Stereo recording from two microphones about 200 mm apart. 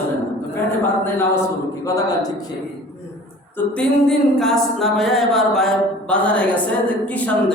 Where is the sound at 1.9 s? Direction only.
20° left (ahead or behind).